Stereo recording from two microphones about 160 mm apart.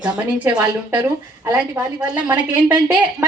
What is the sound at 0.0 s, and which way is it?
Speech, 5° right (ahead or behind).